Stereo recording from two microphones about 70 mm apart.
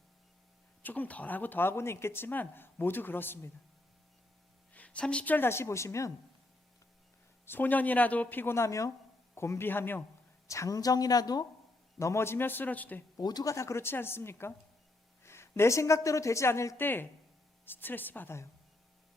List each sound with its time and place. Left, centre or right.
0.8 s speech: left
4.7 s a woman's voice: centre
5.5 s speech: left
7.4 s a woman's voice: left
10.5 s a woman's voice: left
11.9 s speech: left
13.1 s speech: left
13.5 s a woman's voice: left
16.8 s speech: left